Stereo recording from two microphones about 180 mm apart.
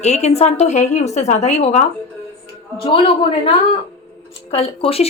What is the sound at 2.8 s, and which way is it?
Speech, 30° left (ahead or behind).